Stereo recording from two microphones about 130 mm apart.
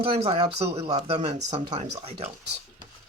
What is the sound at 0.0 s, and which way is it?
Speech, 45° right (ahead or behind).